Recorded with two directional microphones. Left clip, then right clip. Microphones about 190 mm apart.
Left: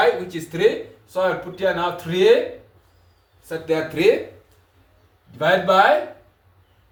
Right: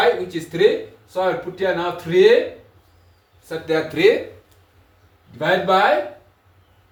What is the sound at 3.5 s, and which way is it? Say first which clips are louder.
Speech: right 1 dB; 25° right (ahead or behind).